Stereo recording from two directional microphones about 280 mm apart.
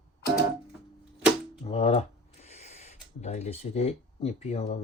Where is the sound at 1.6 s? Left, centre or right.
Left.